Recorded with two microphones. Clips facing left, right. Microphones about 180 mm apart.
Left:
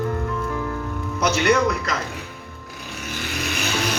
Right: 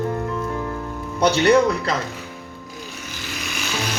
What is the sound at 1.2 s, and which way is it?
Speech, 30° right (ahead or behind).